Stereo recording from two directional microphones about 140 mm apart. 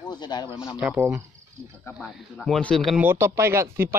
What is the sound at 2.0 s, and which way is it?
Speech, 5° left (ahead or behind).